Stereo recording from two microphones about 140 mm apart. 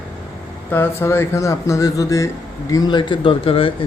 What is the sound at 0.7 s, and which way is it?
A man's voice, 15° left (ahead or behind).